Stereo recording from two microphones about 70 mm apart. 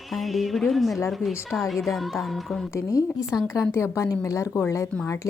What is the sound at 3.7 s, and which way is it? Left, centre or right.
Speech, left.